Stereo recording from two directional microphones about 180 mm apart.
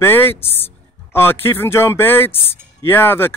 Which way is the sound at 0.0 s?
10° left (ahead or behind).